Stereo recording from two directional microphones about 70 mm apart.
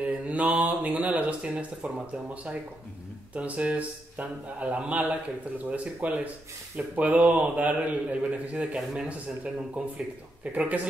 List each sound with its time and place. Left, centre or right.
0.0 s a man's voice: right